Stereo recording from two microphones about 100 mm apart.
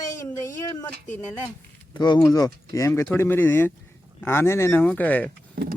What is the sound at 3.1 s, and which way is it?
Speech, 20° left (ahead or behind).